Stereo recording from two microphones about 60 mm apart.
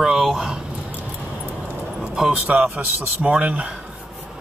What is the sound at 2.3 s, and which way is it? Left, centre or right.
Speech, right.